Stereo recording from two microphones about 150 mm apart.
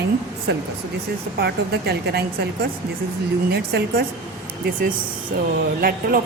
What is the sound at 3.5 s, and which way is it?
Speech, 90° right.